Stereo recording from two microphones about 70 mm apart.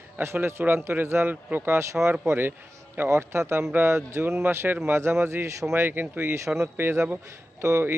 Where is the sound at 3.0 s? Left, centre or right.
Right.